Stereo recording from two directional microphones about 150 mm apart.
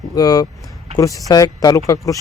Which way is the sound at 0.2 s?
25° left (ahead or behind).